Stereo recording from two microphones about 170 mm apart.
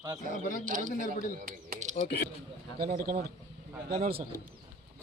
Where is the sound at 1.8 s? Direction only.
45° right (ahead or behind).